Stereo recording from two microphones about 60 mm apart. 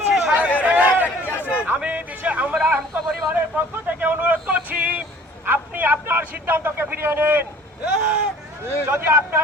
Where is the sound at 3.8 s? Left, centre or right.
Right.